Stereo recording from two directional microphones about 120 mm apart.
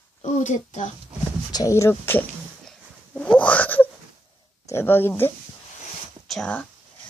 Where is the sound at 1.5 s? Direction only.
30° left (ahead or behind).